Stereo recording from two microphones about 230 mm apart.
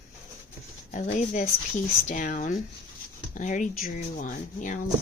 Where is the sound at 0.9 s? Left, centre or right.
Left.